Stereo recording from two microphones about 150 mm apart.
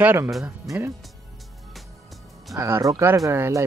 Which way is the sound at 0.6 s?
15° right (ahead or behind).